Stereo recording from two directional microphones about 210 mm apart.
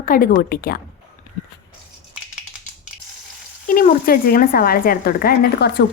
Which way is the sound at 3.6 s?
40° left (ahead or behind).